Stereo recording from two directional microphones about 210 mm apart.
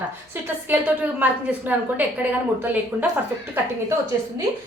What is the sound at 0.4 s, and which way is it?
A woman's voice, 10° right (ahead or behind).